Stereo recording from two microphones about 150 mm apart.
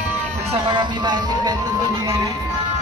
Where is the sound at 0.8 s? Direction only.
30° right (ahead or behind).